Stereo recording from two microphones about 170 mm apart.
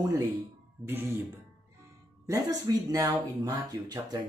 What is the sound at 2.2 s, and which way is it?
Speech, 20° right (ahead or behind).